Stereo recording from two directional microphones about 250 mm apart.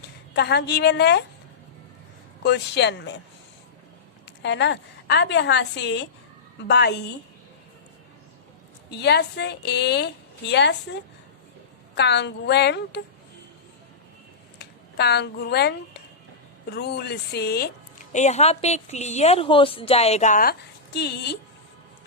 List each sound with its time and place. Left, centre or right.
0.3 s a woman's voice: left
2.4 s a woman's voice: left
4.4 s a woman's voice: left
8.9 s a woman's voice: left
11.9 s a woman's voice: left
14.6 s a woman's voice: left
18.1 s a woman's voice: left